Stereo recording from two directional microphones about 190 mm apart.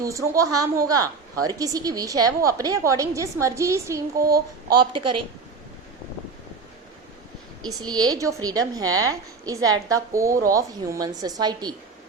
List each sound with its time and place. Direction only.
0.0 s a woman's voice: 15° right (ahead or behind)
4.2 s child singing: 55° right (ahead or behind)
4.7 s a woman's voice: 25° right (ahead or behind)
7.7 s a woman's voice: 20° right (ahead or behind)